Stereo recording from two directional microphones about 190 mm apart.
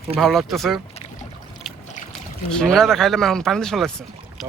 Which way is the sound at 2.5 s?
5° left (ahead or behind).